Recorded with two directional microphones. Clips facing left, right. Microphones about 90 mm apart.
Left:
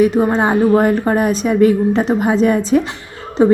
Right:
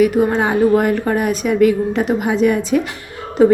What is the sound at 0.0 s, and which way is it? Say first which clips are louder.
A woman's voice: left 1 dB; 30° left (ahead or behind).